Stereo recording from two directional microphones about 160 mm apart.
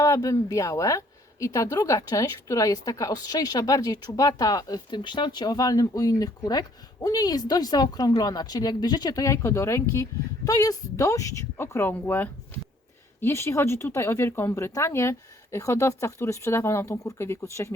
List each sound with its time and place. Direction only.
0.0 s a woman's voice: 20° left (ahead or behind)